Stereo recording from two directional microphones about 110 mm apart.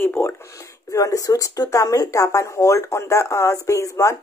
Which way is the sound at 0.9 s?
30° left (ahead or behind).